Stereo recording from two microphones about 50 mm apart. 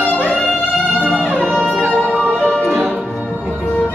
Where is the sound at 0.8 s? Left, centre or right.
Right.